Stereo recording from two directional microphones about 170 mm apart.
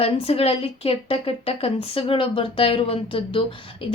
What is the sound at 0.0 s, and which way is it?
A woman's voice, 35° left (ahead or behind).